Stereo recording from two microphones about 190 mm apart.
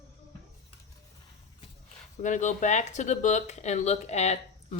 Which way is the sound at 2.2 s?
40° left (ahead or behind).